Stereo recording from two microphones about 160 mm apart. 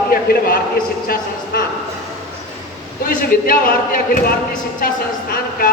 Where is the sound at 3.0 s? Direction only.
60° left (ahead or behind).